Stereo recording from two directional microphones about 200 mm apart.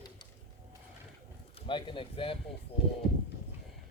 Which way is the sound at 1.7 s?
25° left (ahead or behind).